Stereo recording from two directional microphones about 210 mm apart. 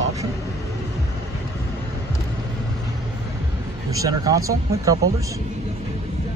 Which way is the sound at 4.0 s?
15° right (ahead or behind).